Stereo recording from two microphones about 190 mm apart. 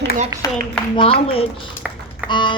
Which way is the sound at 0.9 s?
30° left (ahead or behind).